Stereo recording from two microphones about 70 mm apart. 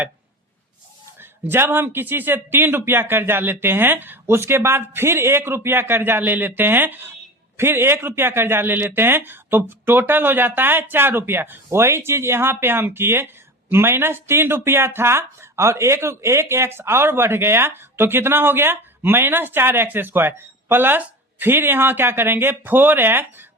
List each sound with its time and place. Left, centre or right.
1.2 s speech: right